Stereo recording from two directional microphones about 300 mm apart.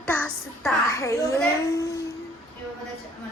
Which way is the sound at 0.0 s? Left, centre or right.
Centre.